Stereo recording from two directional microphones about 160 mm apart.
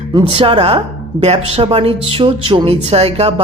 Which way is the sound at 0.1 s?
30° right (ahead or behind).